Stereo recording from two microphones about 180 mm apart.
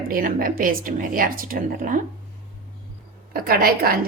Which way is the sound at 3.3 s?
55° right (ahead or behind).